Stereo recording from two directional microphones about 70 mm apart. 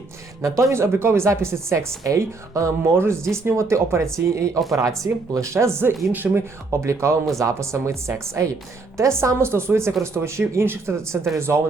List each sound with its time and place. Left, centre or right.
0.4 s speech: right
2.9 s a woman's voice: right
5.8 s speech: right
6.7 s a woman's voice: right